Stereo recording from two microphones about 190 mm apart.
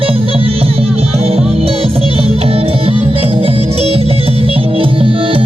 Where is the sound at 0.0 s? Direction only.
30° right (ahead or behind).